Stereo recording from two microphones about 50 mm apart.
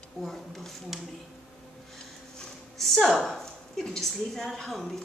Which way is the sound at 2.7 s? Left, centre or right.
Centre.